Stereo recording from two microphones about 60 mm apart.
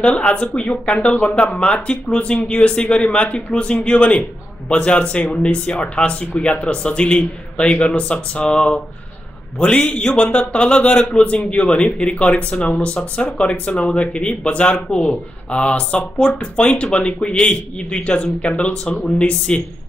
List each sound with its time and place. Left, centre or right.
0.0 s speech: centre
9.6 s speech: centre
15.5 s speech: left